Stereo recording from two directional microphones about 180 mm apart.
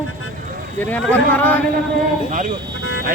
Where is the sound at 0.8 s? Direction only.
10° left (ahead or behind).